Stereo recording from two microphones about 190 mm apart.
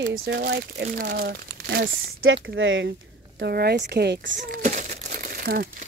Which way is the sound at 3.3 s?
55° right (ahead or behind).